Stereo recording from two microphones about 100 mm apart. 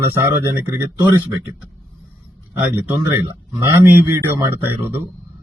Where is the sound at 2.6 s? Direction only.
15° right (ahead or behind).